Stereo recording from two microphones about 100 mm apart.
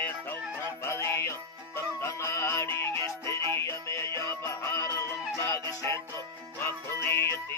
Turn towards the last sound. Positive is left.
turn(degrees=25)  # may be behind; listen again after turning